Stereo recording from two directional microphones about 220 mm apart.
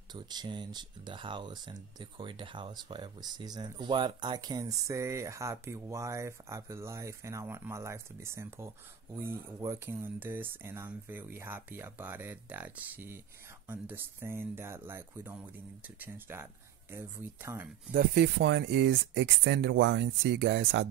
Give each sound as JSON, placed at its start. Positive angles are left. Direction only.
{"t": 0.1, "sound": "speech", "side_deg": -20}
{"t": 17.9, "sound": "speech", "side_deg": -50}